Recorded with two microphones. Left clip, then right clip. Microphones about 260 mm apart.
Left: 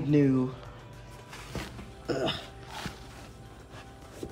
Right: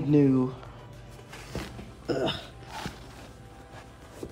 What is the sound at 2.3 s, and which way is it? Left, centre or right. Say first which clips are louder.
Dog: right 1 dB; centre.